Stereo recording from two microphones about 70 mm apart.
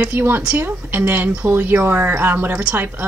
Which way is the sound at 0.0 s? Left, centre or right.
Right.